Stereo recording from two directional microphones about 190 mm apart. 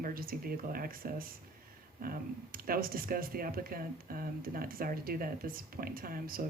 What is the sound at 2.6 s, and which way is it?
Speech, 50° right (ahead or behind).